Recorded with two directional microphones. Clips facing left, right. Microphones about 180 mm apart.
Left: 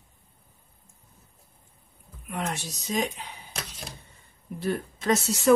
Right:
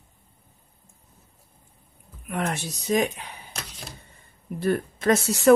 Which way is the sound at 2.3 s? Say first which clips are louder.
Right 4 dB; 60° right (ahead or behind).